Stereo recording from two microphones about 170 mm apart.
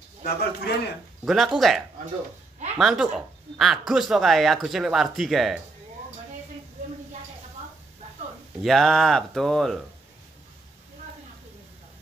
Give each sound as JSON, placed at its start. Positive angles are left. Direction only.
{"t": 0.2, "sound": "a man's voice", "side_deg": 75}
{"t": 1.2, "sound": "speech", "side_deg": 0}
{"t": 2.8, "sound": "speech", "side_deg": 0}
{"t": 8.6, "sound": "speech", "side_deg": 0}